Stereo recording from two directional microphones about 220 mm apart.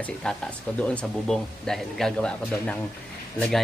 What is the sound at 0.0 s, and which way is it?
Speech, 5° left (ahead or behind).